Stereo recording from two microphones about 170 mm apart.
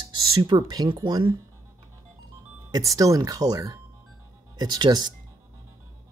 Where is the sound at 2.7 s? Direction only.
20° right (ahead or behind).